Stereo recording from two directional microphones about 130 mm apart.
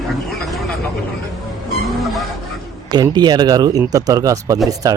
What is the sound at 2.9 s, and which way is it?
Speech, 30° right (ahead or behind).